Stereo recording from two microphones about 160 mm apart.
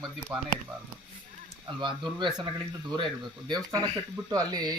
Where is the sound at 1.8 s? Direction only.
30° right (ahead or behind).